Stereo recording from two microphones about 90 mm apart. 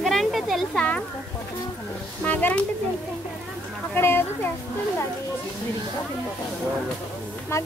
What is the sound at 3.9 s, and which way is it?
Speech, 25° left (ahead or behind).